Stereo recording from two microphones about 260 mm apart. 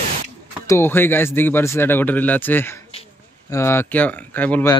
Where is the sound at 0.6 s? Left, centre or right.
Centre.